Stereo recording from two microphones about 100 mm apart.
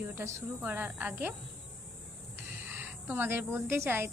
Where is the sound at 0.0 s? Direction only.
25° right (ahead or behind).